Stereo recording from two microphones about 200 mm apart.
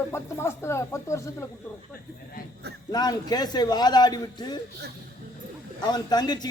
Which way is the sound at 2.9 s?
20° left (ahead or behind).